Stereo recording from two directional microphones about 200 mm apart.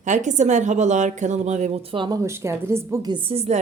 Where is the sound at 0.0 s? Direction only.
40° right (ahead or behind).